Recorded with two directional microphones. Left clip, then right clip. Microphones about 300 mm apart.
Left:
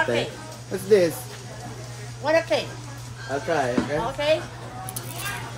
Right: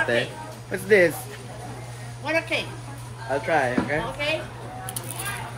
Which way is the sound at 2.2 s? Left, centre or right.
Centre.